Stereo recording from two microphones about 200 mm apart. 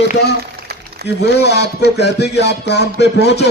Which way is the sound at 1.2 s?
55° left (ahead or behind).